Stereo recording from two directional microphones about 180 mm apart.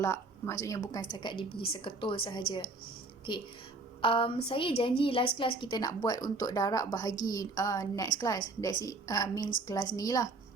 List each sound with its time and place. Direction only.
0.0 s a woman's voice: 15° left (ahead or behind)
4.0 s a woman's voice: 30° left (ahead or behind)